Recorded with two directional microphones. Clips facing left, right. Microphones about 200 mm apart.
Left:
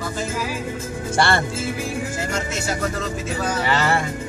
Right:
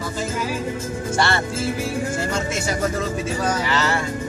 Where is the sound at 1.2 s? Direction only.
55° left (ahead or behind).